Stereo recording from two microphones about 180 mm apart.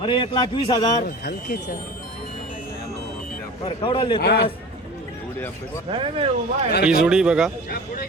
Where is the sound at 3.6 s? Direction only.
30° left (ahead or behind).